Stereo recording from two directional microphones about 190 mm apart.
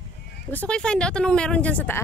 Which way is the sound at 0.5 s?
5° left (ahead or behind).